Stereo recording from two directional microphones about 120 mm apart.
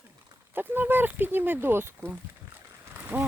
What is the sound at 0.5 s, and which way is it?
Speech, 15° right (ahead or behind).